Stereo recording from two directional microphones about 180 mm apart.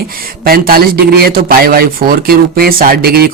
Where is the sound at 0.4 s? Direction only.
55° right (ahead or behind).